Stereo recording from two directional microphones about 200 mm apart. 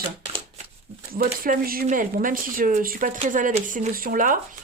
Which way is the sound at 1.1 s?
45° right (ahead or behind).